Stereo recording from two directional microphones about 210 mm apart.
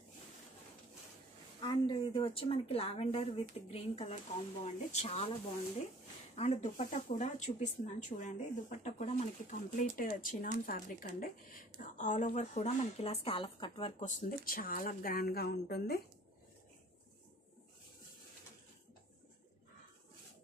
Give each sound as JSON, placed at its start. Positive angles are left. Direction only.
{"t": 1.6, "sound": "speech", "side_deg": 20}
{"t": 6.3, "sound": "speech", "side_deg": 30}